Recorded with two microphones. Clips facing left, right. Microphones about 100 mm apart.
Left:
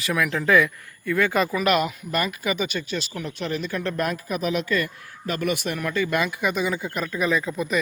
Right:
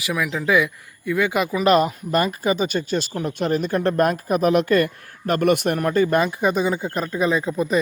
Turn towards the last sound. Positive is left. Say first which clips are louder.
# right 3 dB
turn(degrees=-30)  # may be behind; listen again after turning